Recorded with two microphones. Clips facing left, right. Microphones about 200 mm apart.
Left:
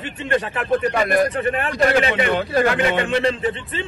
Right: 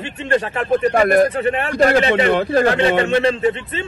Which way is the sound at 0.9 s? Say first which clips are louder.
Right 5 dB; 50° right (ahead or behind).